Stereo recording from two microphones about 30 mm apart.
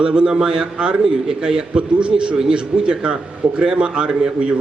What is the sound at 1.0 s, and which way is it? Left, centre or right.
Speech, right.